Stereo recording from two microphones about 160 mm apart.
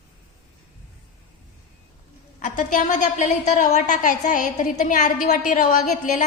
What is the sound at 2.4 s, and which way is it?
A woman's voice, 55° left (ahead or behind).